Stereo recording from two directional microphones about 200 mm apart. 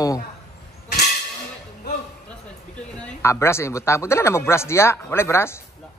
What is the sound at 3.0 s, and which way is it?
Speech, 15° left (ahead or behind).